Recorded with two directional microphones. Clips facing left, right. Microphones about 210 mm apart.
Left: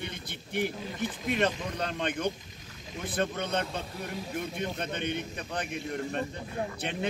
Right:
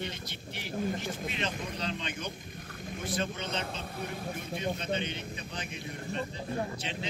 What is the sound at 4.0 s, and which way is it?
Speech, 55° right (ahead or behind).